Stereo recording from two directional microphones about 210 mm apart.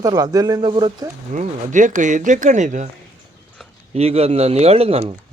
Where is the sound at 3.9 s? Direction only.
30° right (ahead or behind).